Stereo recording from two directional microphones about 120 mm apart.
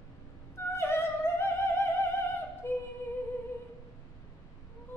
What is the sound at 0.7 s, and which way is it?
Opera, 20° left (ahead or behind).